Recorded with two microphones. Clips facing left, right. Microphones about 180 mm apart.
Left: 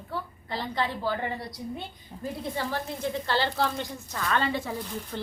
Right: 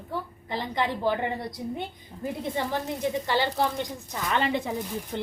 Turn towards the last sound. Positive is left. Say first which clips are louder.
# right 3 dB
turn(degrees=-20)  # may be behind; listen again after turning